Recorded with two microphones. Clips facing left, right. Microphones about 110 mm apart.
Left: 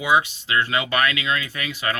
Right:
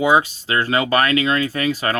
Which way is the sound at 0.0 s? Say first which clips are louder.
Right 4 dB; 40° right (ahead or behind).